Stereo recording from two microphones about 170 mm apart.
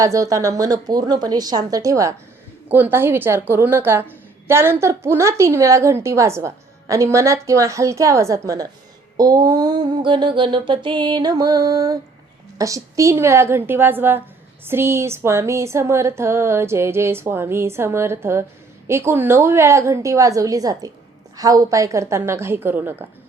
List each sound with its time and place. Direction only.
0.0 s mantra: 20° right (ahead or behind)
2.6 s a woman's voice: 10° right (ahead or behind)
9.1 s mantra: 20° right (ahead or behind)
12.5 s a woman's voice: 20° right (ahead or behind)